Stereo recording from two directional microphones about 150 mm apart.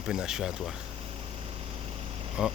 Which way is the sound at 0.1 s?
5° right (ahead or behind).